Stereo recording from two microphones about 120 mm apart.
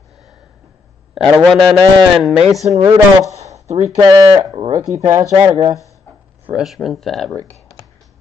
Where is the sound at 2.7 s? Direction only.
25° right (ahead or behind).